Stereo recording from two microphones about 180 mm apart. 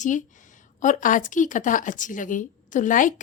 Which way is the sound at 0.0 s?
45° left (ahead or behind).